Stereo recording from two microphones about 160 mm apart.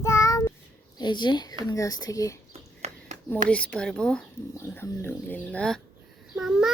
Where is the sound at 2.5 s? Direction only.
45° right (ahead or behind).